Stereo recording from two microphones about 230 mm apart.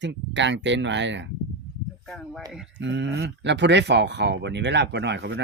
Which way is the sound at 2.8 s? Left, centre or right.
Right.